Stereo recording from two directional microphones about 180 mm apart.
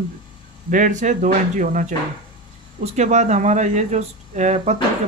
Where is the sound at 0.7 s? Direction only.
45° right (ahead or behind).